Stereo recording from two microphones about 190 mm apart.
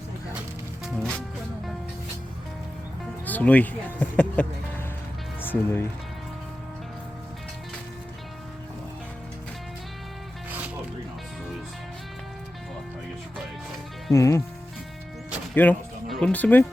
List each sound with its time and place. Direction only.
0.9 s speech: 5° left (ahead or behind)
3.2 s speech: 10° left (ahead or behind)
5.4 s music: 10° left (ahead or behind)
14.1 s speech: 15° left (ahead or behind)
15.5 s speech: 5° left (ahead or behind)